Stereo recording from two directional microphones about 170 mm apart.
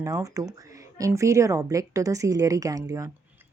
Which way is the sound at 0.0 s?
20° right (ahead or behind).